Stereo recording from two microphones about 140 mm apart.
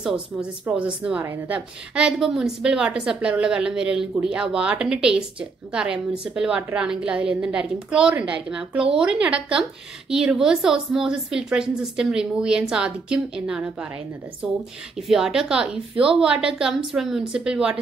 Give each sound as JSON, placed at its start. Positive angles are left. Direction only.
{"t": 0.0, "sound": "speech", "side_deg": -5}
{"t": 1.2, "sound": "a woman's voice", "side_deg": -20}
{"t": 2.0, "sound": "a woman's voice", "side_deg": -5}
{"t": 15.0, "sound": "a woman's voice", "side_deg": 0}